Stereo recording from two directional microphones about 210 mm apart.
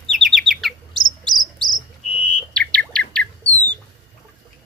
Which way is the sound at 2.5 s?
5° left (ahead or behind).